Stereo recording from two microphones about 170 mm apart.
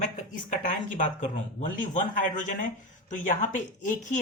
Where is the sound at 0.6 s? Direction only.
50° left (ahead or behind).